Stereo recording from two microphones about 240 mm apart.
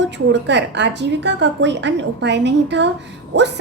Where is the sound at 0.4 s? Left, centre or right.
Right.